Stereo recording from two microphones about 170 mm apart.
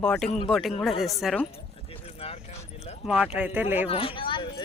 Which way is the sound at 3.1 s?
5° right (ahead or behind).